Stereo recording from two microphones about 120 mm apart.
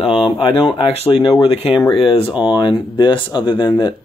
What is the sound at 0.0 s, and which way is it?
Speech, 45° left (ahead or behind).